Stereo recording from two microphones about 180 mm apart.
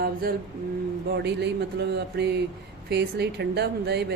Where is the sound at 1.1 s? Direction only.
70° right (ahead or behind).